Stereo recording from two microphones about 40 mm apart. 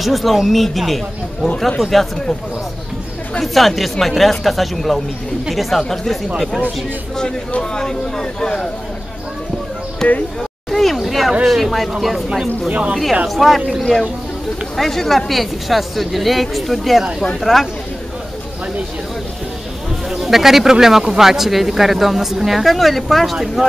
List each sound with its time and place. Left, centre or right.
0.0 s speech: centre
3.3 s speech: centre
5.8 s speech: centre
6.3 s speech: centre
7.7 s speech: centre
10.0 s speech: centre
10.7 s a sound: centre
11.4 s speech: centre
12.6 s speech: right
13.3 s speech: centre
14.8 s speech: centre
20.1 s speech: centre